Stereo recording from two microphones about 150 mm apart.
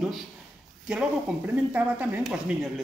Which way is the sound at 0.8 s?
10° right (ahead or behind).